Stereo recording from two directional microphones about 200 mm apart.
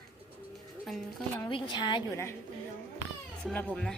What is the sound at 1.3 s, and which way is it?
A woman's voice, 20° left (ahead or behind).